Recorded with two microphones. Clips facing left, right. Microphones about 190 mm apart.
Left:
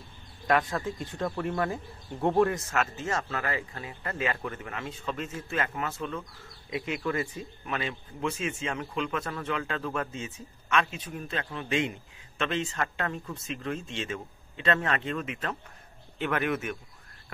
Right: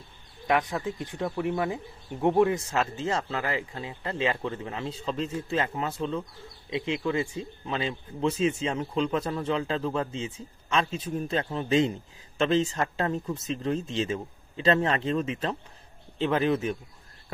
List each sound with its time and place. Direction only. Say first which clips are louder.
0.5 s speech: even; 15° right (ahead or behind)